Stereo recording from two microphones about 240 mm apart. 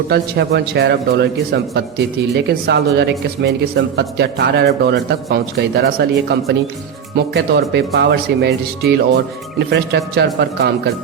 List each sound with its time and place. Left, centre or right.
0.1 s a man's voice: right